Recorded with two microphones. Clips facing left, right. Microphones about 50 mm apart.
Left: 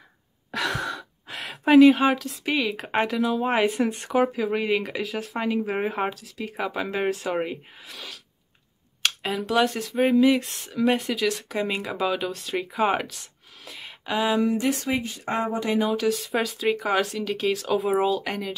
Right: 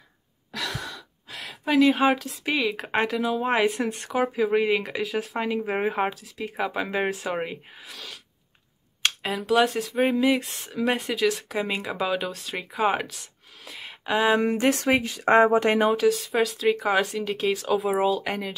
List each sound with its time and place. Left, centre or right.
0.5 s gasp: left
1.9 s speech: centre
9.2 s speech: centre
14.0 s speech: centre
14.3 s speech: right
14.7 s speech: right
16.1 s speech: centre